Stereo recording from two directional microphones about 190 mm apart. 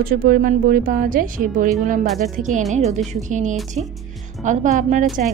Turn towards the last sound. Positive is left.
turn(degrees=-40)  # may be behind; listen again after turning